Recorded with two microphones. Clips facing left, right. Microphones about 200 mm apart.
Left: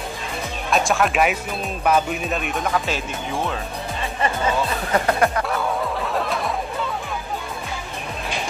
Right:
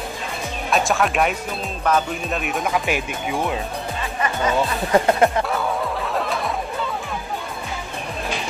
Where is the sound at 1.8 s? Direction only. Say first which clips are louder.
Left 1 dB; 10° left (ahead or behind).